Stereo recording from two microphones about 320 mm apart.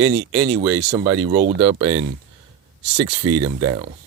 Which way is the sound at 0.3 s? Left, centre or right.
Centre.